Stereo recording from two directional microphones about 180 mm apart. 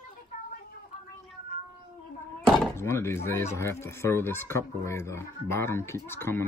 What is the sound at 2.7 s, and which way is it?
Speech, 15° left (ahead or behind).